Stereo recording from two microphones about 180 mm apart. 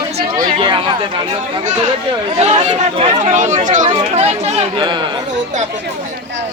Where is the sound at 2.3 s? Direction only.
35° right (ahead or behind).